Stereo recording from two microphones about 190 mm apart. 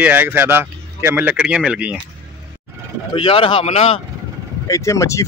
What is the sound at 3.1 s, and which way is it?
Speech, 30° left (ahead or behind).